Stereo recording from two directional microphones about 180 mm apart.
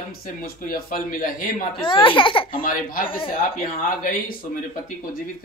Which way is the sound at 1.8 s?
30° left (ahead or behind).